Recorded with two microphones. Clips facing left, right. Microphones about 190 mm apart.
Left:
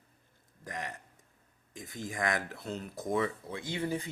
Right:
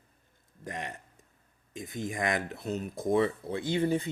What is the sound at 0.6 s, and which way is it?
Speech, 20° right (ahead or behind).